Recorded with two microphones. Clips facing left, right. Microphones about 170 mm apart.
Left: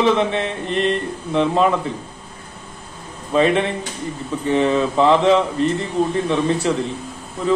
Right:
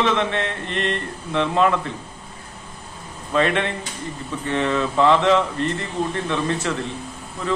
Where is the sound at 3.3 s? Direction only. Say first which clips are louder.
Left 4 dB; 10° left (ahead or behind).